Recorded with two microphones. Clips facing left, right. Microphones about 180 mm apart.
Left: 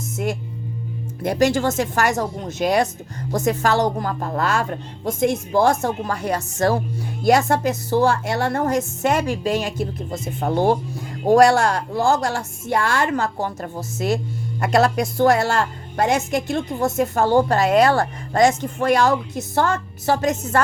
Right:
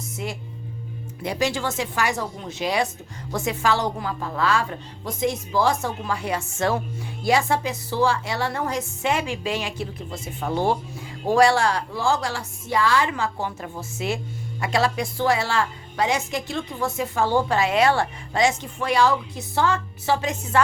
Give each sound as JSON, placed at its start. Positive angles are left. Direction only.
{"t": 0.2, "sound": "a woman's voice", "side_deg": 55}